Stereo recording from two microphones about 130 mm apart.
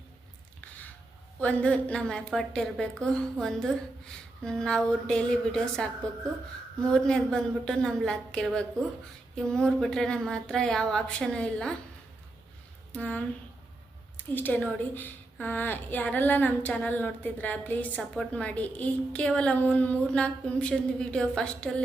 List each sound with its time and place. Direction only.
1.4 s a woman's voice: 10° left (ahead or behind)
6.9 s a woman's voice: 5° left (ahead or behind)
12.9 s speech: 10° left (ahead or behind)
14.3 s a woman's voice: 15° left (ahead or behind)